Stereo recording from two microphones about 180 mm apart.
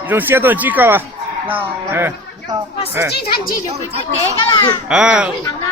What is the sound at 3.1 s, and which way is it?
Speech, 60° left (ahead or behind).